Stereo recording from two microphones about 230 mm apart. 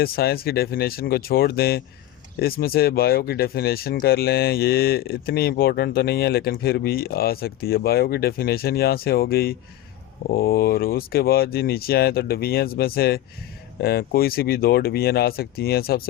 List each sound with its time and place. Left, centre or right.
0.0 s speech: left